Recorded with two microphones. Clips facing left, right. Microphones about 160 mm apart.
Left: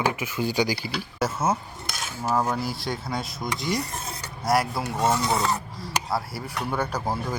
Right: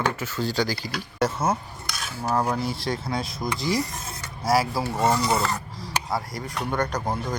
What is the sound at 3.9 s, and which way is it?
Filing, 30° left (ahead or behind).